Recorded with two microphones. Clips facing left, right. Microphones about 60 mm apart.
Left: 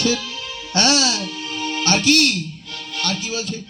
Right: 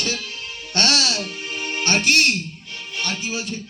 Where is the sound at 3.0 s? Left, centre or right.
Right.